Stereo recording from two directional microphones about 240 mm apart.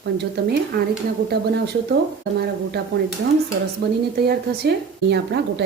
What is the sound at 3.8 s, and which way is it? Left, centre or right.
Speech, right.